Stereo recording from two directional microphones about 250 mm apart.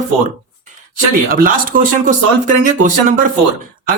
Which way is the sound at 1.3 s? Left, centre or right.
Right.